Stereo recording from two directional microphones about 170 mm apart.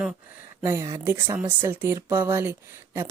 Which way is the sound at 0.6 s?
15° right (ahead or behind).